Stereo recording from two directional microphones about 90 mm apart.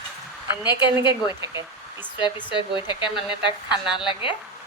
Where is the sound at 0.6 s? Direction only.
55° left (ahead or behind).